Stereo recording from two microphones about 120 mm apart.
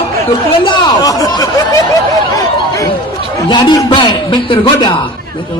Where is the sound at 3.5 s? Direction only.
40° left (ahead or behind).